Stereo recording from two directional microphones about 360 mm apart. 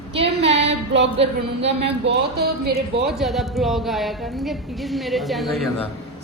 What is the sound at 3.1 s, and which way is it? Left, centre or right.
A woman's voice, centre.